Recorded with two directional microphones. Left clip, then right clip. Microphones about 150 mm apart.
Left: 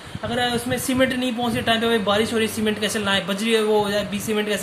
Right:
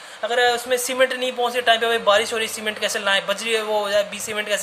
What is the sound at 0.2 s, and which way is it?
A man's voice, 45° right (ahead or behind).